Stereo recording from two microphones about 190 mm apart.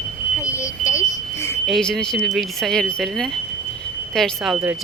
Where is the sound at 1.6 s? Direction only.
Centre (ahead or behind).